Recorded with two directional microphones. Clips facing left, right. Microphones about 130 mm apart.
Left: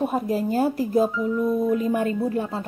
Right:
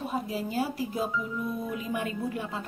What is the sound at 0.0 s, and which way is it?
Speech, 50° left (ahead or behind).